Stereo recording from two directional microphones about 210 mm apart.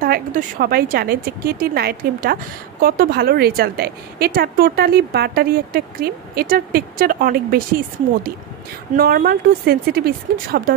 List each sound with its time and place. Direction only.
0.0 s a woman's voice: 40° right (ahead or behind)
8.9 s a woman's voice: 45° right (ahead or behind)